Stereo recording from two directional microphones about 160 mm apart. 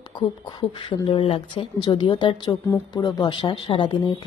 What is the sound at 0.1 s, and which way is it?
A woman's voice, 30° left (ahead or behind).